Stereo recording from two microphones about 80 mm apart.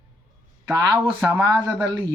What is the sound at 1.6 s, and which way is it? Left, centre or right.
Speech, right.